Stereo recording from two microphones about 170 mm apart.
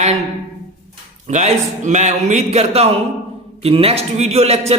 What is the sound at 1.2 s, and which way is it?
A man's voice, 45° right (ahead or behind).